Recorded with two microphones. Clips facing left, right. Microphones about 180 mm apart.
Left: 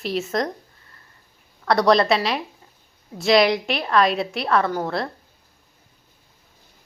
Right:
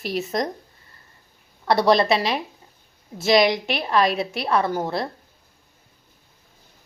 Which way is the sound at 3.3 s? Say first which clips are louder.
Left 1 dB; centre (ahead or behind).